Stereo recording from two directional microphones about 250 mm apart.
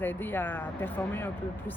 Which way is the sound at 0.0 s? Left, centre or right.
Centre.